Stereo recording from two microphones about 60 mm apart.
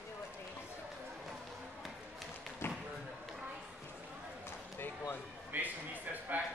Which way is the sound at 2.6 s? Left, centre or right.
Left.